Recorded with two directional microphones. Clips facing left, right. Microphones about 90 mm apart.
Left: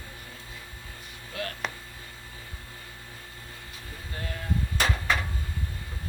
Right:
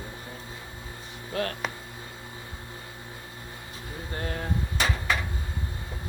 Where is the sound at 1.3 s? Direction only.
35° right (ahead or behind).